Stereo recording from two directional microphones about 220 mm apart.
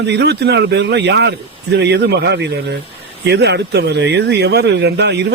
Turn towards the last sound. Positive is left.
turn(degrees=-50)  # may be behind; listen again after turning